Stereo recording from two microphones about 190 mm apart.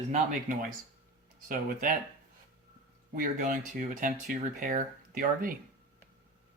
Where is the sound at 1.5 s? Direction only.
45° right (ahead or behind).